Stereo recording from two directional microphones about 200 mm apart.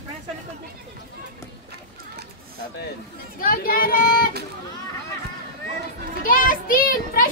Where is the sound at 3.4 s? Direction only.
45° left (ahead or behind).